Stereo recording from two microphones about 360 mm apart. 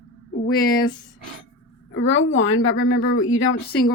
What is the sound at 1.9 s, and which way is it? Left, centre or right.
Speech, left.